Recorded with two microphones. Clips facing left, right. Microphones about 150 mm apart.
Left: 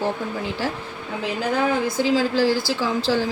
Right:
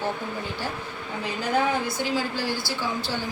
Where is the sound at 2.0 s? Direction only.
90° left.